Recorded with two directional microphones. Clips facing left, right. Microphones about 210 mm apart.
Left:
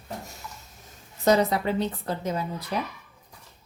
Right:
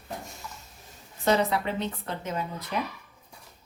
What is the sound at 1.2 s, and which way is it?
A woman's voice, 40° left (ahead or behind).